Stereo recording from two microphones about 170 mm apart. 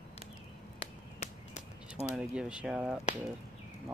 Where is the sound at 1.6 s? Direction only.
40° left (ahead or behind).